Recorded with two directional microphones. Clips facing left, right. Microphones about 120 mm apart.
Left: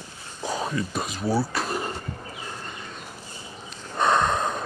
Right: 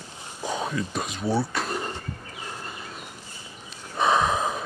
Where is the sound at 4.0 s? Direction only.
5° right (ahead or behind).